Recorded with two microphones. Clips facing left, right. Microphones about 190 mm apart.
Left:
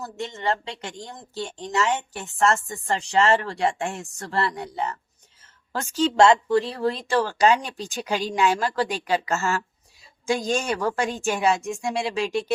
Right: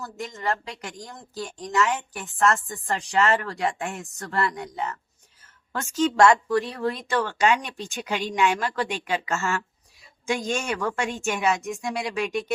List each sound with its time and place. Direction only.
0.0 s speech: 25° left (ahead or behind)